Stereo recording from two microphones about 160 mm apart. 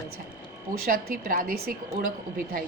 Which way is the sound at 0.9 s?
60° right (ahead or behind).